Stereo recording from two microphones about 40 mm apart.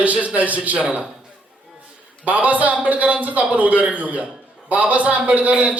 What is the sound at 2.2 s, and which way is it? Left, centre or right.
A man's voice, right.